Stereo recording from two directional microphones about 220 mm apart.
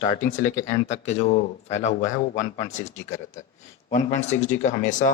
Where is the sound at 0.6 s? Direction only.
30° left (ahead or behind).